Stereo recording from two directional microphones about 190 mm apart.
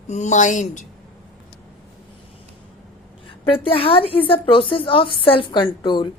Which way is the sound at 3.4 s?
30° left (ahead or behind).